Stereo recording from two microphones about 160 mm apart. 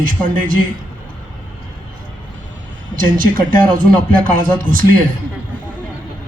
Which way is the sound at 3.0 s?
60° right (ahead or behind).